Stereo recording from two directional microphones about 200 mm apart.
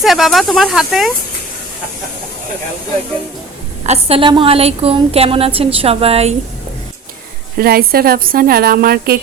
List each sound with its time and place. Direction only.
0.0 s speech: centre (ahead or behind)
3.8 s a woman's voice: 30° right (ahead or behind)
7.6 s a woman's voice: 50° right (ahead or behind)